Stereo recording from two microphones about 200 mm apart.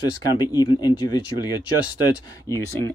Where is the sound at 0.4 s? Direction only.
20° left (ahead or behind).